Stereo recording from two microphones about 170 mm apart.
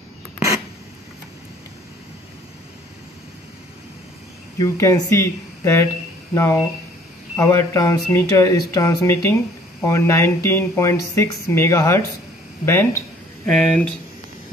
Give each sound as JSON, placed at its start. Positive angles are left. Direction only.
{"t": 4.6, "sound": "speech", "side_deg": 15}
{"t": 13.5, "sound": "speech", "side_deg": 5}